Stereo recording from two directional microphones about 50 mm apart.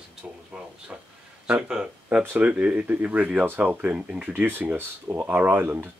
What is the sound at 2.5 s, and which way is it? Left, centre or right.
Speech, right.